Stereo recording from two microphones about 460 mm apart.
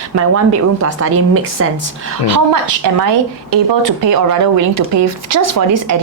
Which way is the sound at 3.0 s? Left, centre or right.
Right.